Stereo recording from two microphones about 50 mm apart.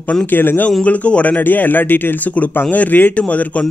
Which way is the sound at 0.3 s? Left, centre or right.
Left.